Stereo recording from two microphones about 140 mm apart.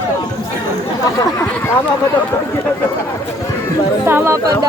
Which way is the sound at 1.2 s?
20° left (ahead or behind).